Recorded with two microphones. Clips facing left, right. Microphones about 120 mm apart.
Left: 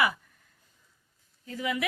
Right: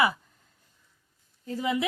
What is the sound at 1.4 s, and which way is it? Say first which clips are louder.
Speech: right 4 dB; 35° right (ahead or behind).